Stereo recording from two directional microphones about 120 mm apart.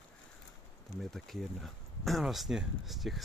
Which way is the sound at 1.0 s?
Centre (ahead or behind).